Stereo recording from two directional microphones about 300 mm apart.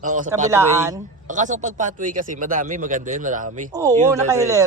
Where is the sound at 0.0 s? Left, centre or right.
Right.